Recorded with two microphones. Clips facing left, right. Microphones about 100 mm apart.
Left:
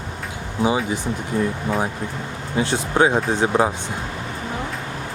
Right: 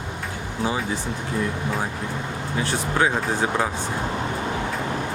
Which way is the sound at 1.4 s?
30° left (ahead or behind).